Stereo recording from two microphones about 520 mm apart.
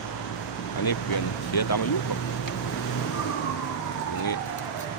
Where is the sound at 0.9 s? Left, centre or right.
Left.